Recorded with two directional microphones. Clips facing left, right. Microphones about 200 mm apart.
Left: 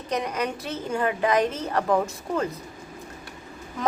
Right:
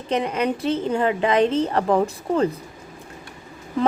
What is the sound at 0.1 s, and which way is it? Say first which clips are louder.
A woman's voice: right 5 dB; 25° right (ahead or behind).